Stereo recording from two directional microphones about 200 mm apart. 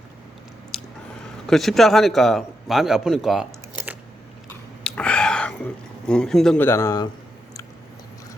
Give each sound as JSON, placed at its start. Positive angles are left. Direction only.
{"t": 0.7, "sound": "biting", "side_deg": 5}
{"t": 1.5, "sound": "a man's voice", "side_deg": 0}
{"t": 4.8, "sound": "whispering", "side_deg": 5}
{"t": 6.1, "sound": "a man's voice", "side_deg": 5}